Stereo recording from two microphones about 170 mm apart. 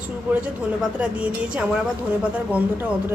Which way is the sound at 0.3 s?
5° right (ahead or behind).